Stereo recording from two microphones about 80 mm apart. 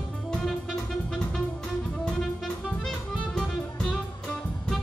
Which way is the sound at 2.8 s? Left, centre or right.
Centre.